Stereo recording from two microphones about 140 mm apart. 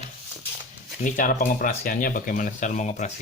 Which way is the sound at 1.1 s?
70° left (ahead or behind).